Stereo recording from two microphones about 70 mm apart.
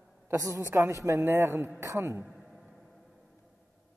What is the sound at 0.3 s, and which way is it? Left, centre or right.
A man's voice, right.